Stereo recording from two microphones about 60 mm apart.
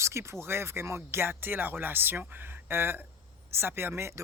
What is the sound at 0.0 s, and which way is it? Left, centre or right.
Speech, right.